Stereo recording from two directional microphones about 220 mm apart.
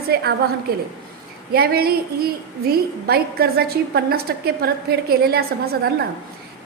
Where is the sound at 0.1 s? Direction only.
45° right (ahead or behind).